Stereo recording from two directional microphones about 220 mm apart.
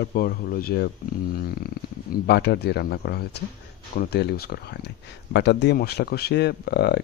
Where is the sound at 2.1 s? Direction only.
50° left (ahead or behind).